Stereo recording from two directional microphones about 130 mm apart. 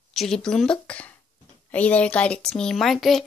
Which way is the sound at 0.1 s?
Centre (ahead or behind).